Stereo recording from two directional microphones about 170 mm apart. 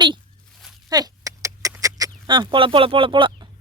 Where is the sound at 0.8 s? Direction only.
20° right (ahead or behind).